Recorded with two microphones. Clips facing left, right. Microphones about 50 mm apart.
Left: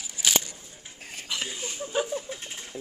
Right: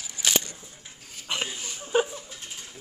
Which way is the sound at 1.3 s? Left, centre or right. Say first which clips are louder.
Right 3 dB; right.